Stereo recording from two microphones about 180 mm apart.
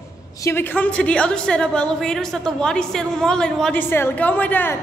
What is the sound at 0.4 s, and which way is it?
A woman's voice, 15° left (ahead or behind).